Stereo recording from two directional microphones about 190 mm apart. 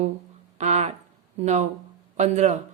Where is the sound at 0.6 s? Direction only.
35° right (ahead or behind).